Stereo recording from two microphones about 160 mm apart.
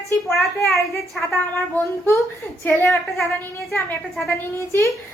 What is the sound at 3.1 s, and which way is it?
Speech, centre (ahead or behind).